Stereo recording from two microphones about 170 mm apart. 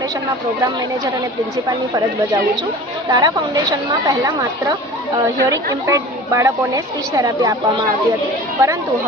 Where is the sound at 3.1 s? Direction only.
25° right (ahead or behind).